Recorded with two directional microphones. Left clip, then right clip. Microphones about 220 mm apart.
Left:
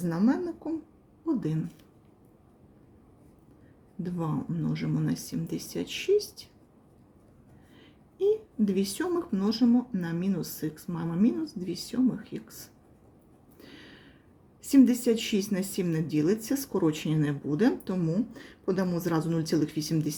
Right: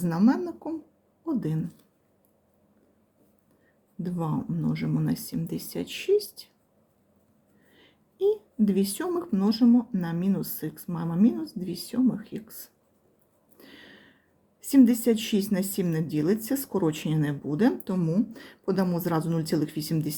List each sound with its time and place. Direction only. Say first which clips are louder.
0.0 s a woman's voice: right 3 dB; 20° right (ahead or behind)
4.0 s a woman's voice: right 2 dB; 15° right (ahead or behind)
7.8 s a woman's voice: right 2 dB; 15° right (ahead or behind)
13.6 s a sound: right 1 dB; 15° right (ahead or behind)
14.6 s a woman's voice: right 1 dB; 15° right (ahead or behind)